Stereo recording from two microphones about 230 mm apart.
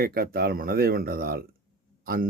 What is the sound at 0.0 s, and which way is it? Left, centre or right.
Speech, right.